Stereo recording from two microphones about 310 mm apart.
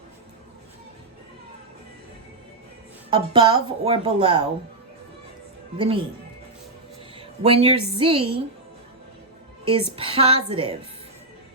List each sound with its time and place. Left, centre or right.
3.1 s speech: centre
5.7 s speech: centre
7.2 s speech: centre
9.6 s speech: centre